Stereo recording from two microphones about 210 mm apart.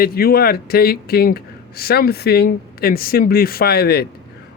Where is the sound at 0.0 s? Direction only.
45° left (ahead or behind).